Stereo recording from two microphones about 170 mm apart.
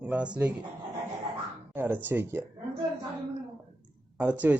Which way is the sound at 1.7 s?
10° right (ahead or behind).